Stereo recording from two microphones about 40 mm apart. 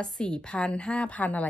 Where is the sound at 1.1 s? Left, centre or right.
Left.